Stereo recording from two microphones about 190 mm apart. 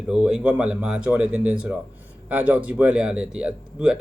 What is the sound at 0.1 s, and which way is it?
Speech, 5° right (ahead or behind).